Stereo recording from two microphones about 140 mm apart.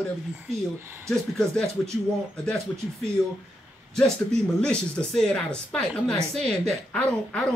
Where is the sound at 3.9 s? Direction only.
5° left (ahead or behind).